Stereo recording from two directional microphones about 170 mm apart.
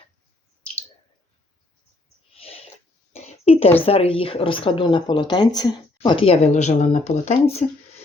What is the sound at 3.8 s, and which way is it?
Speech, 35° left (ahead or behind).